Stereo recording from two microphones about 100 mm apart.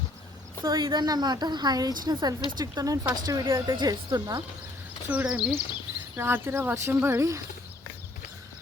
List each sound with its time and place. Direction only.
0.6 s a woman's voice: 35° right (ahead or behind)
3.8 s a woman's voice: 45° right (ahead or behind)
5.0 s speech: 15° right (ahead or behind); by 7.4 s 30° right (ahead or behind)